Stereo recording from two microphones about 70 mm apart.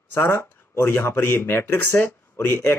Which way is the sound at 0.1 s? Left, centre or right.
Left.